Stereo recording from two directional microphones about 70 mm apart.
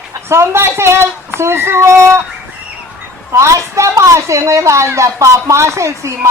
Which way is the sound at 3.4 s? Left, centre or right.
Right.